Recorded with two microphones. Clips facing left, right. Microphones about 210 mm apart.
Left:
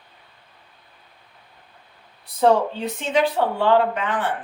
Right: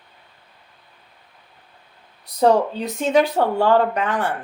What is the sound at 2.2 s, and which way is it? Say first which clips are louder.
Speech: right 1 dB; 40° right (ahead or behind).